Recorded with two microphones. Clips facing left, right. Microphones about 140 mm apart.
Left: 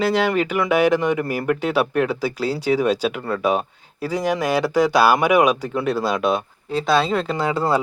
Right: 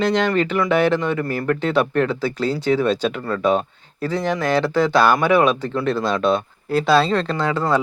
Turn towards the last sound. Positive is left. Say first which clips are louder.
# right 1 dB
turn(degrees=10)  # may be behind; listen again after turning